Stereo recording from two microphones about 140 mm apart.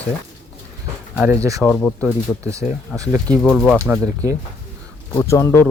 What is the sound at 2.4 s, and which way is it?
Speech, 20° right (ahead or behind).